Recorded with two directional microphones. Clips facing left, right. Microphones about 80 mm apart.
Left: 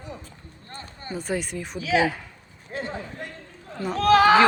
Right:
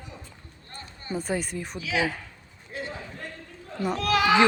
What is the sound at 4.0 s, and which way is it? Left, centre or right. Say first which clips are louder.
Speech: left 7 dB; left.